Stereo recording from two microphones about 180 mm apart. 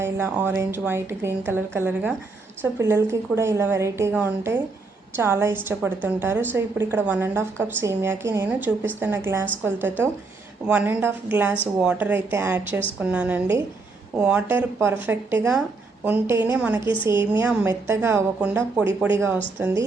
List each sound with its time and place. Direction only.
0.0 s a woman's voice: 10° right (ahead or behind)
16.8 s a woman's voice: 25° left (ahead or behind)
17.4 s a woman's voice: 5° right (ahead or behind)